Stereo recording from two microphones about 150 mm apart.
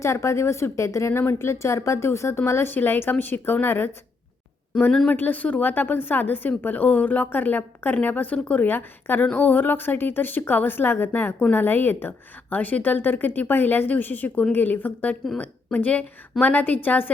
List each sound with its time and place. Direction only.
0.0 s speech: 20° left (ahead or behind)